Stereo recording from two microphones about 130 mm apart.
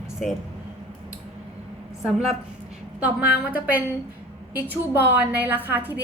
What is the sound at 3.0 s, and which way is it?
Speech, 10° right (ahead or behind).